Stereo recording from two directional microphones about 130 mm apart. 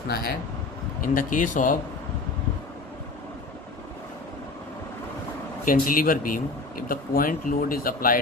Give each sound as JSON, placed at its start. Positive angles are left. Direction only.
{"t": 1.0, "sound": "speech", "side_deg": 90}
{"t": 5.6, "sound": "speech", "side_deg": 90}